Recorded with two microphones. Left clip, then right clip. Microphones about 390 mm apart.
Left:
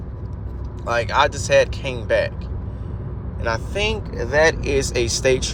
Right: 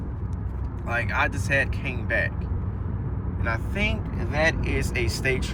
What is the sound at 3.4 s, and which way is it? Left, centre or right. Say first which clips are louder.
Speech: left 5 dB; centre.